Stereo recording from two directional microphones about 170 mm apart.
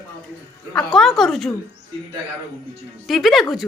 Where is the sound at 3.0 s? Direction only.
Centre (ahead or behind).